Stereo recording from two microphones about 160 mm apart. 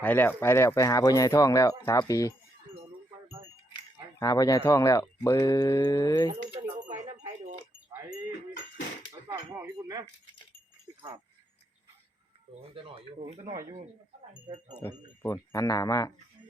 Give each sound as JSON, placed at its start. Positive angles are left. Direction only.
{"t": 0.0, "sound": "speech", "side_deg": 10}
{"t": 4.2, "sound": "speech", "side_deg": 25}
{"t": 6.2, "sound": "keys jangling", "side_deg": -40}
{"t": 7.2, "sound": "wind chime", "side_deg": -45}
{"t": 9.2, "sound": "a sound", "side_deg": -20}
{"t": 12.7, "sound": "speech", "side_deg": -35}
{"t": 15.2, "sound": "speech", "side_deg": 20}